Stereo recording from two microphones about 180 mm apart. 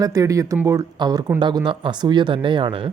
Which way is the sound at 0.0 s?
20° right (ahead or behind).